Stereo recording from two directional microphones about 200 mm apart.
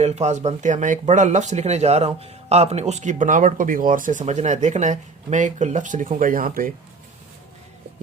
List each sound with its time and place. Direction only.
0.0 s speech: 35° right (ahead or behind)